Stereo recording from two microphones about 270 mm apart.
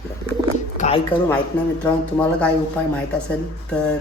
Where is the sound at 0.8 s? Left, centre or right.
Left.